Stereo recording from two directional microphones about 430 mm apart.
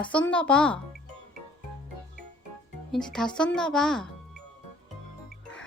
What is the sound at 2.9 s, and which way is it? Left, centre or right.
Speech, centre.